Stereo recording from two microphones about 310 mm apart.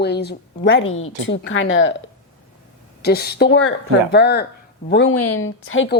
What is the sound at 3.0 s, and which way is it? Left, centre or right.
A woman's voice, left.